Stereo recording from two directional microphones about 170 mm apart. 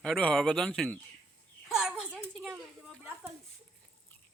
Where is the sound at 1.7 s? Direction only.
Centre (ahead or behind).